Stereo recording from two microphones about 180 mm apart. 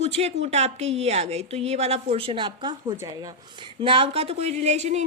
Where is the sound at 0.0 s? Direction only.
35° right (ahead or behind).